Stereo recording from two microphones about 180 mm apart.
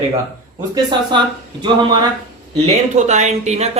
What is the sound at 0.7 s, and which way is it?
Speech, 25° right (ahead or behind).